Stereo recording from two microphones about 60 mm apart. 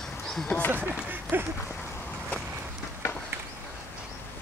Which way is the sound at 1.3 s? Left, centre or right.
Right.